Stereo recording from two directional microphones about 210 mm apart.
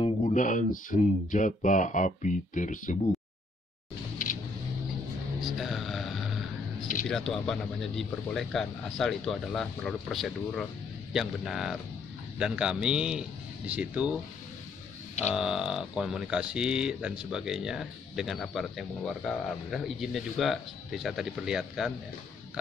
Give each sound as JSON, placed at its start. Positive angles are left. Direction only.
{"t": 0.0, "sound": "speech", "side_deg": 35}
{"t": 5.4, "sound": "speech", "side_deg": 0}
{"t": 15.3, "sound": "speech", "side_deg": -5}